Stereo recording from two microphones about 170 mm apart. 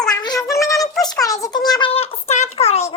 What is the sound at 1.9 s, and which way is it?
Speech, 35° left (ahead or behind).